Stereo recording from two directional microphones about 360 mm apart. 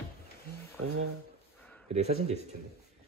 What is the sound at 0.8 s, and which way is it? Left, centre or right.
Speech, right.